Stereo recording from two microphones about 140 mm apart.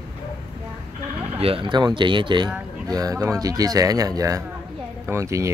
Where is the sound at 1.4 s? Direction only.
40° right (ahead or behind).